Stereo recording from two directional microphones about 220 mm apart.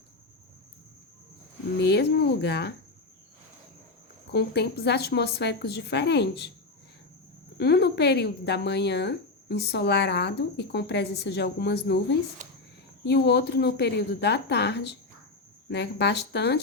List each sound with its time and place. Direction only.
1.8 s speech: 50° left (ahead or behind)
4.3 s speech: 50° left (ahead or behind)
7.6 s speech: 50° left (ahead or behind)
12.4 s a sound: 35° right (ahead or behind)
13.1 s speech: 50° left (ahead or behind)